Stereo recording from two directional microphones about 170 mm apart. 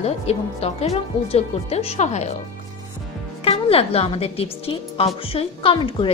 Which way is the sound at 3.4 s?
35° left (ahead or behind).